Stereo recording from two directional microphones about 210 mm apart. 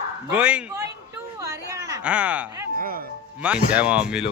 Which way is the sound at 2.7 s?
45° right (ahead or behind).